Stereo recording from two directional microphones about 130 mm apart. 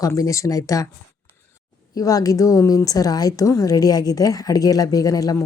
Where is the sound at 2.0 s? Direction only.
30° left (ahead or behind).